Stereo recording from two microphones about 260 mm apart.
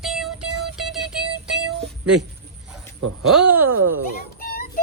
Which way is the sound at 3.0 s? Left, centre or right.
Right.